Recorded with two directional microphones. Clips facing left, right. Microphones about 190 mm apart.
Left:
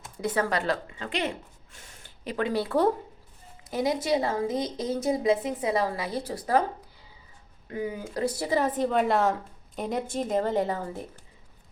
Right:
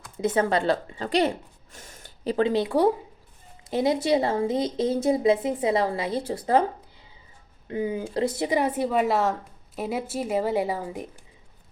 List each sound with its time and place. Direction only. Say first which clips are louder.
0.2 s a woman's voice: right 4 dB; 25° right (ahead or behind)
3.7 s speech: right 4 dB; 25° right (ahead or behind)
7.7 s speech: right 4 dB; 25° right (ahead or behind)